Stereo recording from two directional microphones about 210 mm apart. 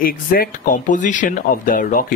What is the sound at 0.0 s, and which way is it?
Speech, 45° left (ahead or behind).